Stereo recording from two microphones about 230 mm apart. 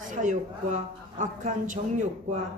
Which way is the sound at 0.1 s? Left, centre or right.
Right.